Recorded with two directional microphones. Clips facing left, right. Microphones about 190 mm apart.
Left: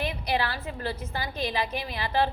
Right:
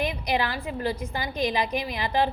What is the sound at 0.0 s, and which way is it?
A woman's voice, 15° right (ahead or behind).